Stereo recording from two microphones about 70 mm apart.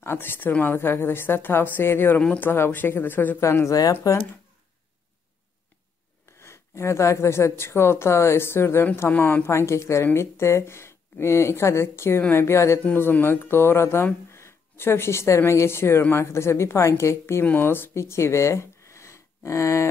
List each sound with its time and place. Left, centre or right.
0.0 s speech: left
3.3 s speech: left
6.4 s speech: left
9.5 s speech: left
17.5 s speech: left